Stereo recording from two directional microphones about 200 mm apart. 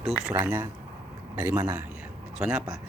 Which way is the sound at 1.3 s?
10° right (ahead or behind).